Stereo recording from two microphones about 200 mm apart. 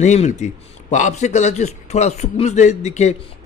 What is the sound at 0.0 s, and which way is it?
A man's voice, 35° left (ahead or behind).